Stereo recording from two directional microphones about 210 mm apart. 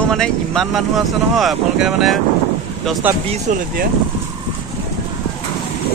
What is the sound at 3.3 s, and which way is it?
Speech, 35° right (ahead or behind).